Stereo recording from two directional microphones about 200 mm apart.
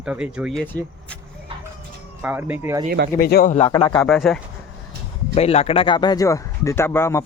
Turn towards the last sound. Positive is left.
turn(degrees=15)  # may be behind; listen again after turning